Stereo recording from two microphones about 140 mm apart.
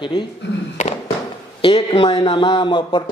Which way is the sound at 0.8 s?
50° left (ahead or behind).